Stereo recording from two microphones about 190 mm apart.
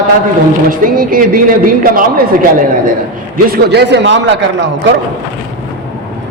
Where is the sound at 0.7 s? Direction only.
45° right (ahead or behind).